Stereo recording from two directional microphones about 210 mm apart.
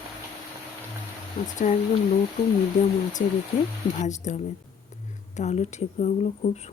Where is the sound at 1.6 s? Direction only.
35° left (ahead or behind).